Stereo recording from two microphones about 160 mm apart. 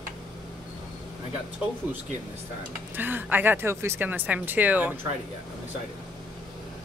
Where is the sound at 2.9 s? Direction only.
10° right (ahead or behind).